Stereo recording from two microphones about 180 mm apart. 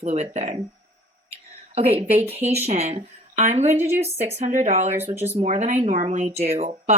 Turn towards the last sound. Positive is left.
turn(degrees=-40)  # may be behind; listen again after turning